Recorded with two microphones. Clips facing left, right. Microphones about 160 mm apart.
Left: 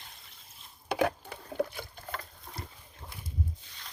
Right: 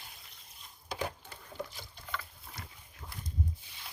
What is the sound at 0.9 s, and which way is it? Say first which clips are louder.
Patter: left 9 dB; 65° left (ahead or behind).